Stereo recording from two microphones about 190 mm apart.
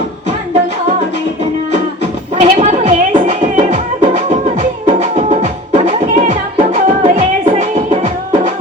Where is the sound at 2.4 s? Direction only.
40° right (ahead or behind).